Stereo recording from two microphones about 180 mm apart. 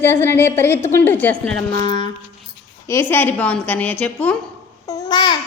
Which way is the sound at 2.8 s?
15° left (ahead or behind).